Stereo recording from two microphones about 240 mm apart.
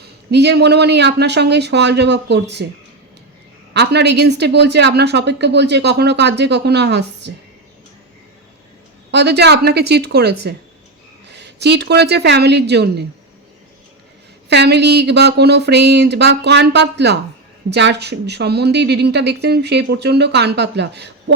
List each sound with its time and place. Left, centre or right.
0.3 s a woman's voice: right
3.8 s a woman's voice: right
9.1 s a woman's voice: right
14.5 s a woman's voice: right